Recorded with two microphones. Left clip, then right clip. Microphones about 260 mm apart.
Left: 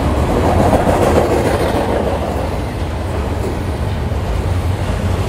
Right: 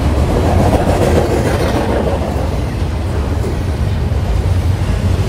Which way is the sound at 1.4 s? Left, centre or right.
Left.